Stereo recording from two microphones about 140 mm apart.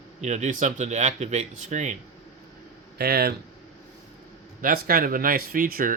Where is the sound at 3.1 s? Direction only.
90° right.